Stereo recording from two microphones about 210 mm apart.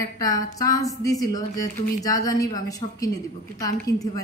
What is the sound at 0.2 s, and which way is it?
A woman's voice, 15° left (ahead or behind).